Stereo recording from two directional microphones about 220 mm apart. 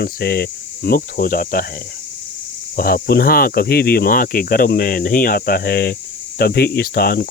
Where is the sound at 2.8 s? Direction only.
40° left (ahead or behind).